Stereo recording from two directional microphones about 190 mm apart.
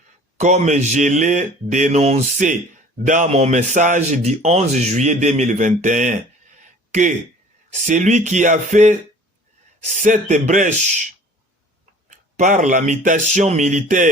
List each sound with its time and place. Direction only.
0.3 s speech: 40° right (ahead or behind)
6.6 s a sound: 40° right (ahead or behind)
7.7 s speech: 40° right (ahead or behind)
12.0 s speech: 40° right (ahead or behind)